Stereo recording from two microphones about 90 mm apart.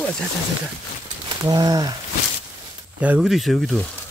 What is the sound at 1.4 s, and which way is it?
Speech, 45° right (ahead or behind).